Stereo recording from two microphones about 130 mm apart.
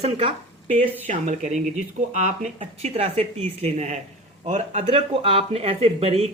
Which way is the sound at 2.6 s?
50° right (ahead or behind).